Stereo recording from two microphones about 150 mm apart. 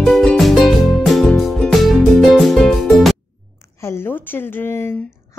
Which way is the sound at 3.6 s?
20° left (ahead or behind).